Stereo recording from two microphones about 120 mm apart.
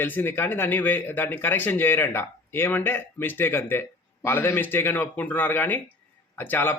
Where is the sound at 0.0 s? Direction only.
15° left (ahead or behind).